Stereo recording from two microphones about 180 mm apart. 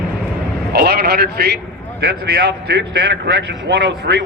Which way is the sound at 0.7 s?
60° right (ahead or behind).